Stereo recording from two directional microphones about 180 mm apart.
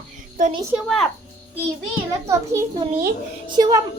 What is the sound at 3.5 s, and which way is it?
Speech, 25° right (ahead or behind).